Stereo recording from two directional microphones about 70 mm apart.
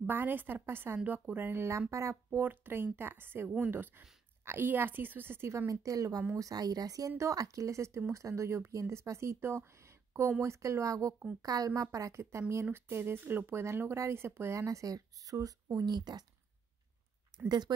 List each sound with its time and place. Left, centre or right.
0.0 s a woman's voice: right
2.4 s speech: right
3.4 s speech: centre
3.7 s a woman's voice: right
5.7 s speech: right
17.5 s speech: right